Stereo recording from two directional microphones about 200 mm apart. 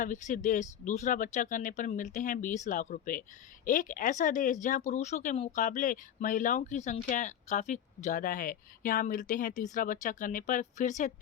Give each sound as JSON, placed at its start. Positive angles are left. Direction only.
{"t": 0.0, "sound": "speech", "side_deg": 40}